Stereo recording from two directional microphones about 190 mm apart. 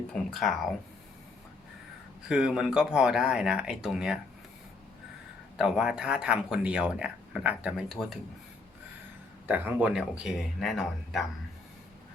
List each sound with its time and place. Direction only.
0.1 s speech: centre (ahead or behind)
2.2 s speech: 5° right (ahead or behind)
5.5 s speech: 5° right (ahead or behind)
9.5 s speech: 10° right (ahead or behind)